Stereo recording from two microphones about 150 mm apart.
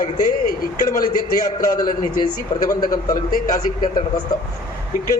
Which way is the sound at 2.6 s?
70° left (ahead or behind).